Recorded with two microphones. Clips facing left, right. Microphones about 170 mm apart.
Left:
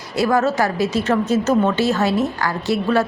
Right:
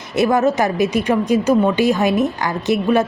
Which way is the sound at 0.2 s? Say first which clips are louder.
Right 2 dB; 20° right (ahead or behind).